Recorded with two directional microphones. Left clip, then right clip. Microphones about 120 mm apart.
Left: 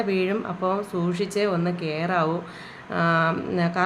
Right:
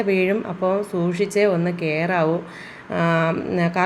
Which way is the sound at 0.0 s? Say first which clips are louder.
Right 4 dB; 20° right (ahead or behind).